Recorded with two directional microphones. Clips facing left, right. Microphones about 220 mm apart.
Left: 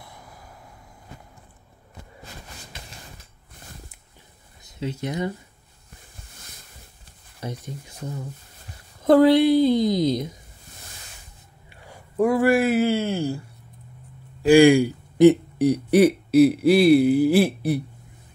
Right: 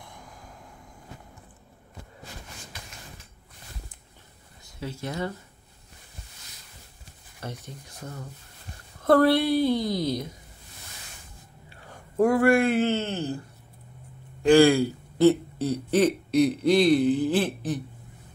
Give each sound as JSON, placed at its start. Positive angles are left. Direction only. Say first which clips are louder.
{"t": 0.0, "sound": "a sound", "louder": "left 1 dB", "side_deg": 5}
{"t": 4.7, "sound": "speech", "louder": "left 4 dB", "side_deg": 20}
{"t": 7.4, "sound": "speech", "louder": "left 4 dB", "side_deg": 10}
{"t": 9.0, "sound": "speech", "louder": "left 5 dB", "side_deg": 15}
{"t": 12.2, "sound": "speech", "louder": "left 1 dB", "side_deg": 0}
{"t": 14.4, "sound": "speech", "louder": "left 3 dB", "side_deg": 15}